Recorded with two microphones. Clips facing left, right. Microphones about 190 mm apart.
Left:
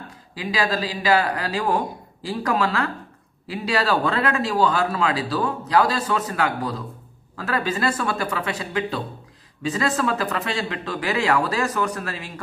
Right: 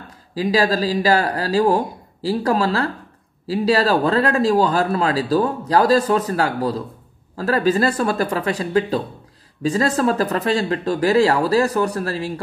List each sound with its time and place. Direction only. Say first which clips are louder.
0.3 s speech: right 6 dB; 40° right (ahead or behind)